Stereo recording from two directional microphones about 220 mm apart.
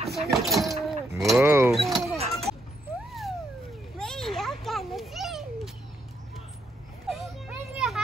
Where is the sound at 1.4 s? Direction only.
10° right (ahead or behind).